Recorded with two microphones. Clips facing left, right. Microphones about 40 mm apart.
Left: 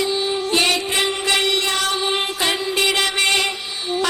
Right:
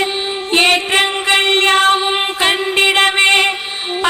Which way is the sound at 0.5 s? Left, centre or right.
Right.